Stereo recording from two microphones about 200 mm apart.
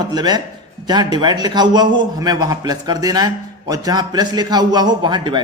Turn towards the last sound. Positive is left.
turn(degrees=-25)  # may be behind; listen again after turning